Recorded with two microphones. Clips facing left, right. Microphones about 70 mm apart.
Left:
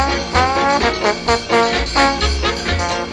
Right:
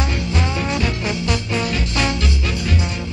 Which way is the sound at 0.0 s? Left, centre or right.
Left.